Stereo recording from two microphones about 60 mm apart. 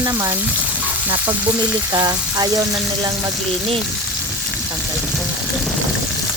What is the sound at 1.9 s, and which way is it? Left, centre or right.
Speech, right.